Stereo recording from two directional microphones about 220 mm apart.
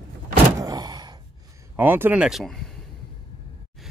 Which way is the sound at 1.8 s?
10° right (ahead or behind).